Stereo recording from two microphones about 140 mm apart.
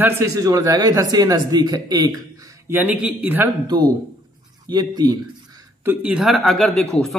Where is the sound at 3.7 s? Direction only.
30° right (ahead or behind).